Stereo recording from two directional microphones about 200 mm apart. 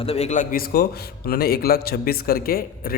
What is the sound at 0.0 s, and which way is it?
A man's voice, 30° left (ahead or behind).